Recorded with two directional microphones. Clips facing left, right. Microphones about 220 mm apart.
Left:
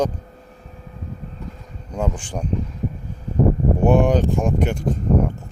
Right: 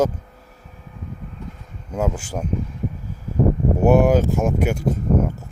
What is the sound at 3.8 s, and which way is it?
Speech, 5° right (ahead or behind).